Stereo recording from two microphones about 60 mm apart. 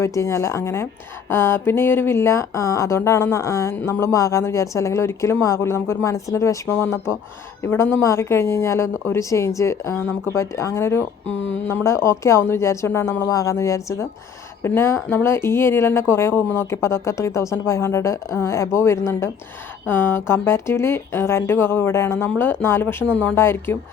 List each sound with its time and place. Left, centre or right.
0.0 s speech: left
7.6 s speech: left
8.0 s speech: left
13.2 s speech: left
14.6 s speech: left
19.9 s speech: left